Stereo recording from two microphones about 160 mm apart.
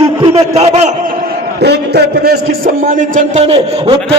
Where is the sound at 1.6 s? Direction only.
90° right.